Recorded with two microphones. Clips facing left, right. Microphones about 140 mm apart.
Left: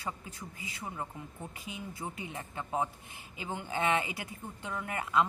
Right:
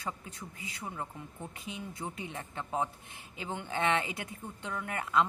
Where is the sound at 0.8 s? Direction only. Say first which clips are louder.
Even; centre (ahead or behind).